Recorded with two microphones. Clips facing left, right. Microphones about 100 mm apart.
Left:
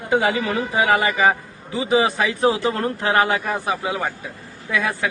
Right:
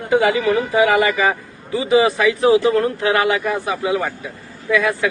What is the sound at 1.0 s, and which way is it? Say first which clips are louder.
A man's voice: right 1 dB; 30° left (ahead or behind).